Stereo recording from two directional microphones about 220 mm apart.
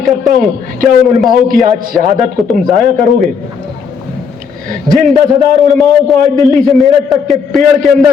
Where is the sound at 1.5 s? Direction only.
Centre (ahead or behind).